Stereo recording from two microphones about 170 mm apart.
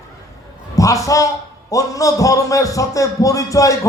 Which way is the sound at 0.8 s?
20° left (ahead or behind).